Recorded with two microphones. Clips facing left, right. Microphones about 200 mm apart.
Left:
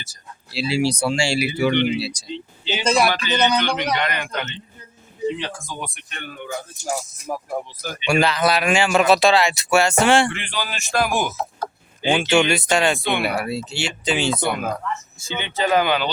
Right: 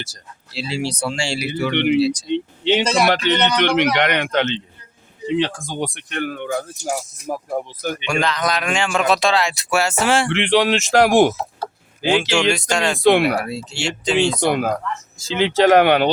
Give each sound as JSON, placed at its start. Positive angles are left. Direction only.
{"t": 0.5, "sound": "speech", "side_deg": 10}
{"t": 1.7, "sound": "speech", "side_deg": -65}
{"t": 2.0, "sound": "speech", "side_deg": 10}
{"t": 2.2, "sound": "speech", "side_deg": -70}
{"t": 5.3, "sound": "speech", "side_deg": -65}
{"t": 7.3, "sound": "speech", "side_deg": -30}
{"t": 7.8, "sound": "speech", "side_deg": -60}
{"t": 8.0, "sound": "a man's voice", "side_deg": 10}
{"t": 10.3, "sound": "speech", "side_deg": -80}
{"t": 12.3, "sound": "a man's voice", "side_deg": 5}
{"t": 13.0, "sound": "speech", "side_deg": -90}
{"t": 13.2, "sound": "a man's voice", "side_deg": 5}
{"t": 14.5, "sound": "speech", "side_deg": -90}